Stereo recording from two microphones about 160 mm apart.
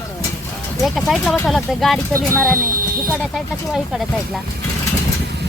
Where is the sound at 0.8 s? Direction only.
Centre (ahead or behind).